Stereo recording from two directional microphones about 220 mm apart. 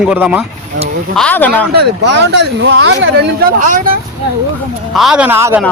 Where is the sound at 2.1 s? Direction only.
55° right (ahead or behind).